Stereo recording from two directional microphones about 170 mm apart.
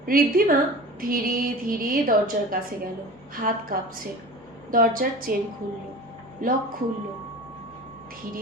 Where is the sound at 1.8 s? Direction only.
55° right (ahead or behind).